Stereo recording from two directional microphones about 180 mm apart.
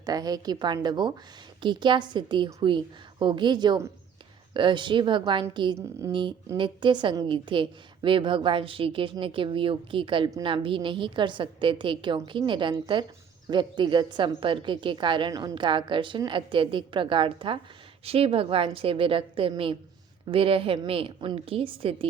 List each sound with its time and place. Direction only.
0.0 s a woman's voice: 20° right (ahead or behind)